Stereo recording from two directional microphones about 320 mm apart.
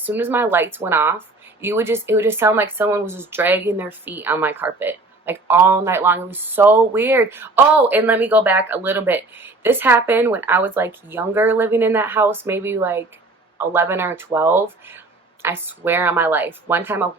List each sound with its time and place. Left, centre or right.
0.0 s speech: centre